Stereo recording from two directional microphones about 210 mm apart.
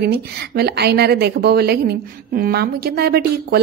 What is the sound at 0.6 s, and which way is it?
A man's voice, 50° right (ahead or behind).